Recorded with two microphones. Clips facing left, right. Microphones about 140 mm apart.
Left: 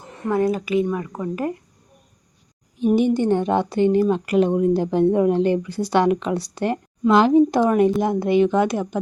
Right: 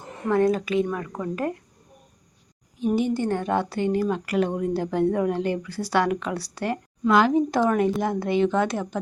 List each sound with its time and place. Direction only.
0.3 s a woman's voice: 5° left (ahead or behind)
2.7 s a woman's voice: 20° left (ahead or behind)